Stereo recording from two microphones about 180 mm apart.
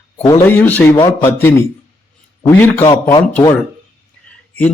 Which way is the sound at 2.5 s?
10° left (ahead or behind).